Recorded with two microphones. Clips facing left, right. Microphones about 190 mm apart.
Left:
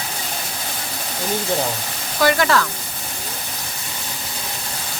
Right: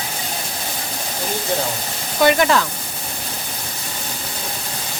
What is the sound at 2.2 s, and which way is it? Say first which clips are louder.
Speech: right 2 dB; 20° right (ahead or behind).